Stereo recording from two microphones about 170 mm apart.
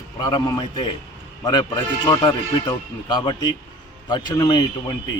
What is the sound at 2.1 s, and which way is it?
A man's voice, 25° left (ahead or behind).